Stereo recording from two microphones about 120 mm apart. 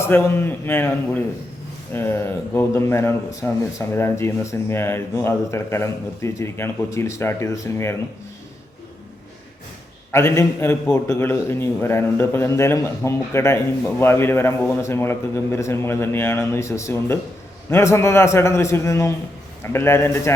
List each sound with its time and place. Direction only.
0.0 s speech: 20° left (ahead or behind)
1.9 s speech: 20° left (ahead or behind)
10.1 s speech: 25° left (ahead or behind)